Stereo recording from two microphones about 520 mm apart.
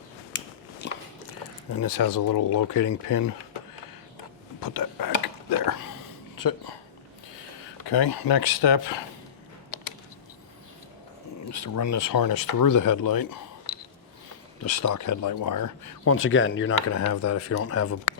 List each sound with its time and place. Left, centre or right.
1.8 s speech: left
4.6 s whispering: left
6.3 s speech: left
7.9 s speech: left
11.4 s speech: left
14.6 s speech: left
16.1 s speech: left